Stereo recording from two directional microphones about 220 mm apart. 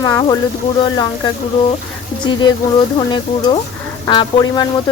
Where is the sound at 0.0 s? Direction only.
15° left (ahead or behind).